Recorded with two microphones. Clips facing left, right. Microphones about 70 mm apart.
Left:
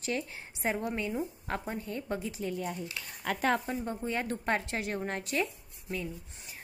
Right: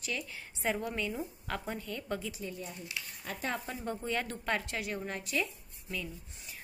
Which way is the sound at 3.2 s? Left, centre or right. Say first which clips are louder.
Left 9 dB; left.